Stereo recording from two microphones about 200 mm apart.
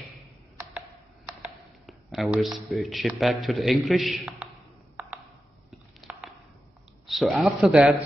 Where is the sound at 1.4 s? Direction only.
Centre (ahead or behind).